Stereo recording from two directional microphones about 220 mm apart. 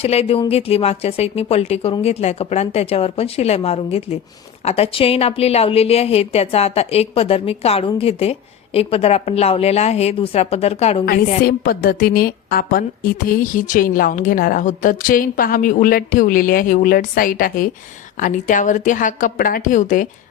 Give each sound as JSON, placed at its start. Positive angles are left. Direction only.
{"t": 0.0, "sound": "a woman's voice", "side_deg": 30}
{"t": 11.4, "sound": "a woman's voice", "side_deg": 40}